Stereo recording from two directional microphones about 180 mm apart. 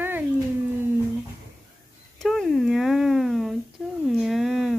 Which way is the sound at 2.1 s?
Centre (ahead or behind).